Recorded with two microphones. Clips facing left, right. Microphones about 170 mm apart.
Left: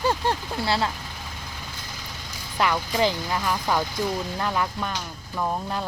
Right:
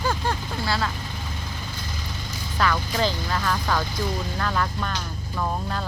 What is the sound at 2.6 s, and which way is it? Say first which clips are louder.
Speech: left 1 dB; 15° left (ahead or behind).